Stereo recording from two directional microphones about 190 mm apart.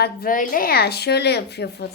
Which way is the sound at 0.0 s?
50° left (ahead or behind).